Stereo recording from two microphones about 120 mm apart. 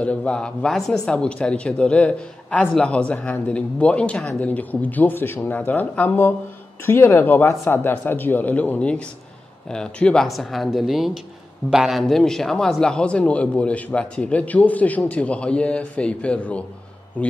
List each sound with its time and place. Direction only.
0.0 s speech: 10° left (ahead or behind)